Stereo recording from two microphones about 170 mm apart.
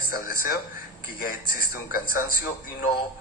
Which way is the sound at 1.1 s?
55° left (ahead or behind).